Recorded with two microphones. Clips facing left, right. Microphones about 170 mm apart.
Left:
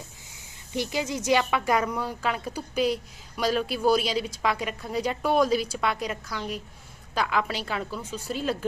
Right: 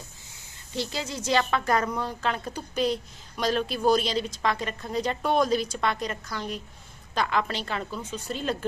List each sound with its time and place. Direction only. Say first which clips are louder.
0.7 s speech: left 3 dB; 15° left (ahead or behind)